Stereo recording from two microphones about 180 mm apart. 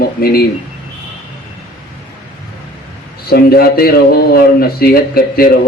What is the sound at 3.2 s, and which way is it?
Speech, 60° left (ahead or behind).